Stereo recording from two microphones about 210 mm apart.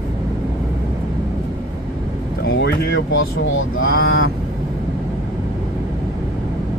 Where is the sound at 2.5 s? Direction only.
60° left (ahead or behind).